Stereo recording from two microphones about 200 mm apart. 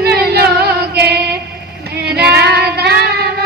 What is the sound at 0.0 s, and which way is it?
Female singing, 50° right (ahead or behind).